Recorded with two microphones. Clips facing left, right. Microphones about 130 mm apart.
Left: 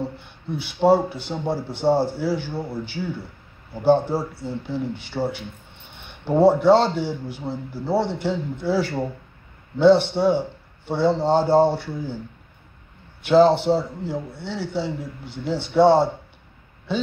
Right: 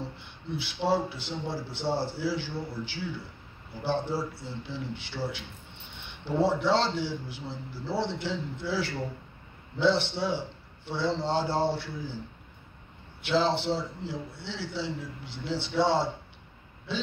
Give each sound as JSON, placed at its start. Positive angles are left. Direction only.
{"t": 0.2, "sound": "a man's voice", "side_deg": 50}
{"t": 13.2, "sound": "a man's voice", "side_deg": 50}